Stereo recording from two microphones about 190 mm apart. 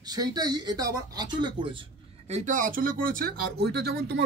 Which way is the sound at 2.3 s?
40° right (ahead or behind).